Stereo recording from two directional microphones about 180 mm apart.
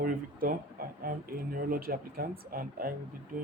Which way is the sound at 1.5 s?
55° right (ahead or behind).